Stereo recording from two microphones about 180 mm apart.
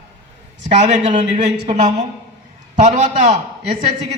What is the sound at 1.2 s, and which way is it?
A man's voice, 35° right (ahead or behind).